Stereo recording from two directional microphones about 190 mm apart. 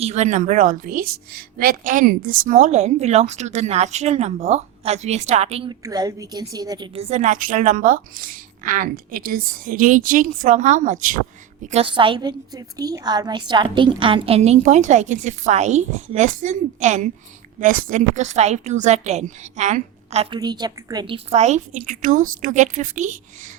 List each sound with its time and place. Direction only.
0.0 s a woman's voice: 35° right (ahead or behind)
5.8 s a woman's voice: 20° right (ahead or behind); by 11.2 s 45° right (ahead or behind)
11.6 s a woman's voice: 35° right (ahead or behind)
20.4 s a woman's voice: 20° right (ahead or behind); by 23.1 s 40° right (ahead or behind)